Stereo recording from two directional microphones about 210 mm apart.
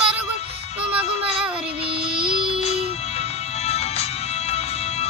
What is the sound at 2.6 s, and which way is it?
Music, 30° left (ahead or behind).